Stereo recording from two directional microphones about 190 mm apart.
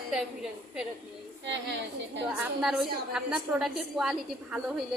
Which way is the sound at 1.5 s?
65° right (ahead or behind).